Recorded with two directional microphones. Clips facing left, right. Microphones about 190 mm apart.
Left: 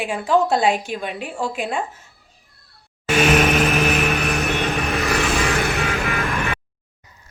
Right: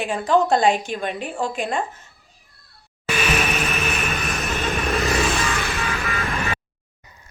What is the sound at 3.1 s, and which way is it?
Vehicle, 80° left.